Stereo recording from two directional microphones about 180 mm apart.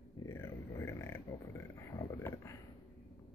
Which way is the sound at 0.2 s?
15° left (ahead or behind).